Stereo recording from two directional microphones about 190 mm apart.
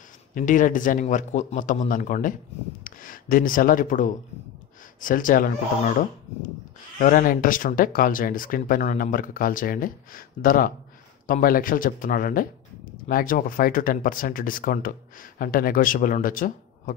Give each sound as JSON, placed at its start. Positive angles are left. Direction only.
{"t": 0.3, "sound": "speech", "side_deg": 45}
{"t": 7.0, "sound": "speech", "side_deg": 45}